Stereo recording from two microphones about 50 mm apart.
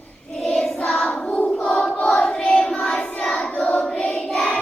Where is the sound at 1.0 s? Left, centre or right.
Left.